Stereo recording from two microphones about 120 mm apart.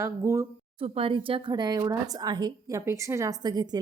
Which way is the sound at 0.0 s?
25° right (ahead or behind).